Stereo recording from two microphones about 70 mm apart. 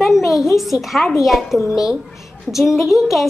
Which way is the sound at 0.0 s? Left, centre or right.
Centre.